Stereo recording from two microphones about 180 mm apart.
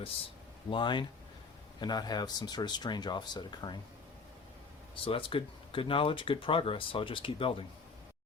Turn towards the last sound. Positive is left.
turn(degrees=30)  # may be behind; listen again after turning